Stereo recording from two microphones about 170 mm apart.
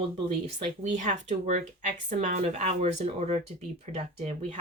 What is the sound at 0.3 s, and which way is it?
Speech, 45° right (ahead or behind).